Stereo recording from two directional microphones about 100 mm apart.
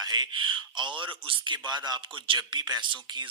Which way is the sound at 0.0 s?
45° right (ahead or behind).